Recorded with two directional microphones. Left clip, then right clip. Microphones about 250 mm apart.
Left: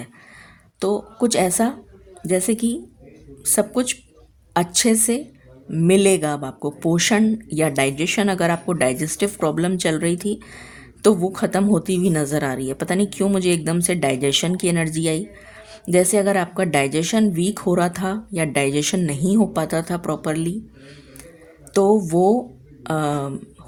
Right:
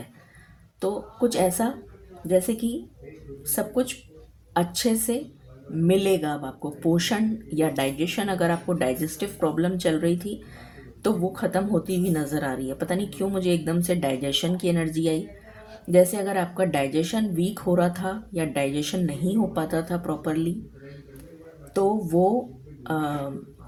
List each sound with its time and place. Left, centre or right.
0.8 s a woman's voice: left
21.7 s a woman's voice: left